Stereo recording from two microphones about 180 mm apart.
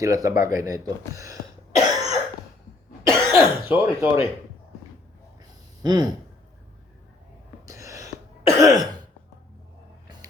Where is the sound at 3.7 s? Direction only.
10° right (ahead or behind).